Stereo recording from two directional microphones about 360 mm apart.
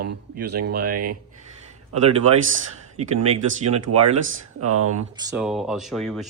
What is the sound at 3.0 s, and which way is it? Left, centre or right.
Speech, centre.